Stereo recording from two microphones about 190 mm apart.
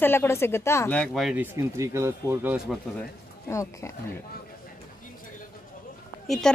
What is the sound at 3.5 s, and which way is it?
Speech, 15° left (ahead or behind).